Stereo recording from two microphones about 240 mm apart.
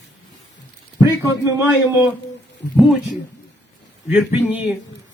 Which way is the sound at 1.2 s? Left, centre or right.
Centre.